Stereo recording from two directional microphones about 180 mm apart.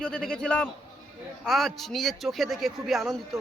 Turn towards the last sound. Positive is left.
turn(degrees=0)  # may be behind; listen again after turning